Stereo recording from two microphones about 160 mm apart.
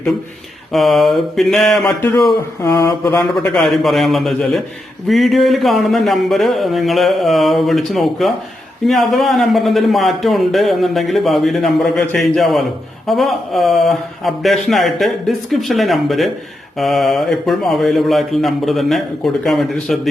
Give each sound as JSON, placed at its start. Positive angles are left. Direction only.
{"t": 0.7, "sound": "speech", "side_deg": 0}
{"t": 2.2, "sound": "a sound", "side_deg": 25}
{"t": 3.3, "sound": "speech", "side_deg": 5}